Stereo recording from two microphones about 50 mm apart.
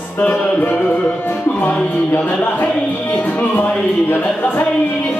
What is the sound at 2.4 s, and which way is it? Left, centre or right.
Music, left.